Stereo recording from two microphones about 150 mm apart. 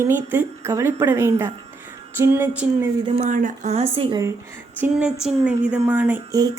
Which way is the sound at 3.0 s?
40° right (ahead or behind).